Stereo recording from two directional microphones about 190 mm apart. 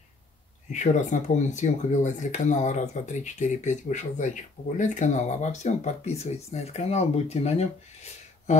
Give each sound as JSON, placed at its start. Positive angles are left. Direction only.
{"t": 0.7, "sound": "speech", "side_deg": 40}